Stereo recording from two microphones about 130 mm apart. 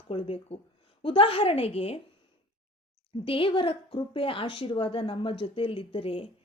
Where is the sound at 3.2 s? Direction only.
45° left (ahead or behind).